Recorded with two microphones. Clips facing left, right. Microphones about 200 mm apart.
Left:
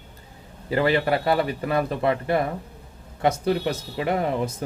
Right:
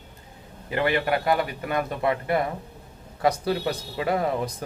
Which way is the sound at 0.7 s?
30° left (ahead or behind).